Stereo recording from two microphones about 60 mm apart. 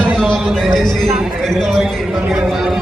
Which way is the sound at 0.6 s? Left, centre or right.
Centre.